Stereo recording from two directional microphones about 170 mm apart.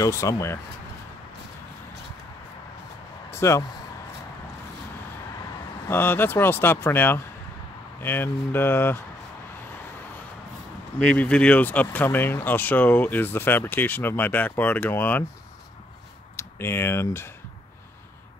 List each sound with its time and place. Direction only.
0.0 s speech: 20° left (ahead or behind)
3.3 s speech: 15° left (ahead or behind)
5.9 s speech: 10° left (ahead or behind)
11.0 s speech: 5° left (ahead or behind)
16.3 s speech: 15° left (ahead or behind)